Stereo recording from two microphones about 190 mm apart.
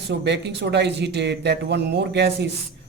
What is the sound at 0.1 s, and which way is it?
Speech, 65° right (ahead or behind).